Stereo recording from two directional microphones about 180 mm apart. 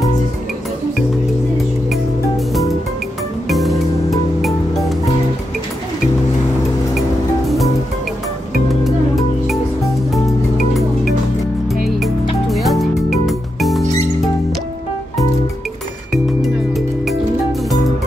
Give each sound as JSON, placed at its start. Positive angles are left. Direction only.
{"t": 3.4, "sound": "music", "side_deg": 0}
{"t": 7.0, "sound": "music", "side_deg": 0}
{"t": 10.7, "sound": "music", "side_deg": 0}
{"t": 16.1, "sound": "music", "side_deg": 0}